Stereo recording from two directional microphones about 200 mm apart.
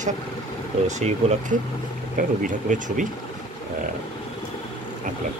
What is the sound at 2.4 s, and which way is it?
Speech, 40° right (ahead or behind).